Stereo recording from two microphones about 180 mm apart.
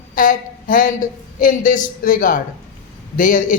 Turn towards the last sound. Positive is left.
turn(degrees=50)  # may be behind; listen again after turning